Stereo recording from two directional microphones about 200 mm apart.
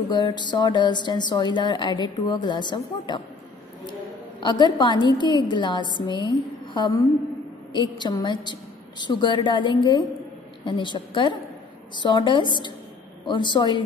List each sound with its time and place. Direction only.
0.1 s a woman's voice: 20° left (ahead or behind)
4.4 s a woman's voice: 20° left (ahead or behind)